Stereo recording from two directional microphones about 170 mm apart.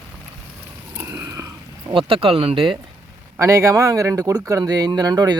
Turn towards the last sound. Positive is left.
turn(degrees=-25)  # may be behind; listen again after turning